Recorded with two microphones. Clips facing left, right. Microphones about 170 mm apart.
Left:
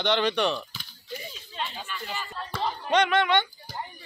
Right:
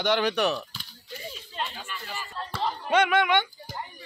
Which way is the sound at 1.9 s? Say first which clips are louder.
Left 2 dB; 5° right (ahead or behind).